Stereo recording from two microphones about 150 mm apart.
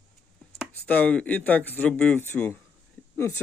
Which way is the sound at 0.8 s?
10° left (ahead or behind).